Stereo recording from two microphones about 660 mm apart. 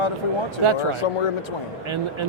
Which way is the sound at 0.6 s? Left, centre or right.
Right.